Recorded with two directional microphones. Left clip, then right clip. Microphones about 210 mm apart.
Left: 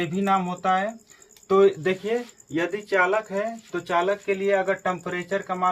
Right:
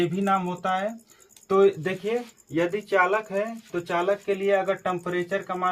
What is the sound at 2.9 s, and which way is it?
Speech, 15° left (ahead or behind).